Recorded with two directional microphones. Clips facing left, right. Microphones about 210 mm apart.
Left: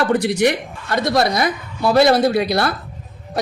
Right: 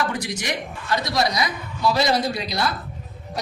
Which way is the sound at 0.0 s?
60° left (ahead or behind).